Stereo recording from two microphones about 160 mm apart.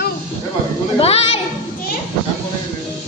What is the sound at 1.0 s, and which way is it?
Speech, 40° left (ahead or behind).